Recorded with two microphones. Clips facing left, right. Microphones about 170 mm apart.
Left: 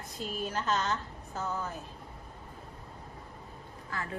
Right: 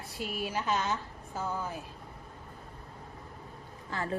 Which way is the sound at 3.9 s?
30° right (ahead or behind).